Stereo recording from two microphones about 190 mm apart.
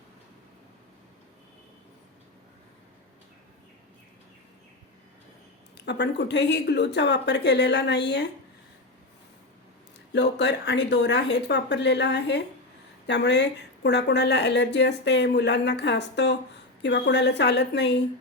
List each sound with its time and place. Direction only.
5.7 s speech: 65° left (ahead or behind)
10.1 s speech: 65° left (ahead or behind)